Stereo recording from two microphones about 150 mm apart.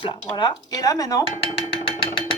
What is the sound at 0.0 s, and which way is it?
Speech, 30° left (ahead or behind).